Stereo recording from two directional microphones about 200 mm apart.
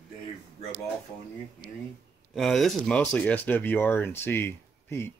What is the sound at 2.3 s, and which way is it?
Speech, centre (ahead or behind).